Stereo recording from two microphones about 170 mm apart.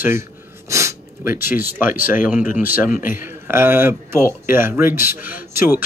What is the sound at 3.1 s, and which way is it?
Speech, 15° right (ahead or behind).